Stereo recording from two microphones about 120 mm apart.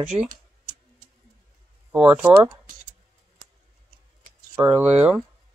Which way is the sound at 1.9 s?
10° right (ahead or behind).